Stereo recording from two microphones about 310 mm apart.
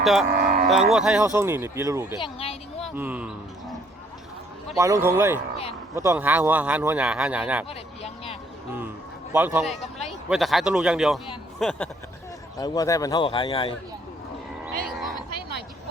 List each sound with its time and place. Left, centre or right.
0.0 s speech: centre
0.3 s cattle: right
0.7 s speech: centre
2.2 s speech: centre
2.8 s speech: centre
4.8 s speech: centre
7.7 s a sound: centre
9.3 s a man's voice: centre
14.8 s a sound: centre